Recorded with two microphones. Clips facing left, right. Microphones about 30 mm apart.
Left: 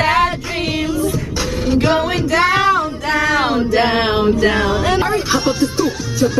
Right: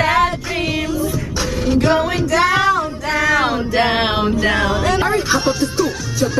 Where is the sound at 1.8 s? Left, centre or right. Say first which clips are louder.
Right 1 dB; centre.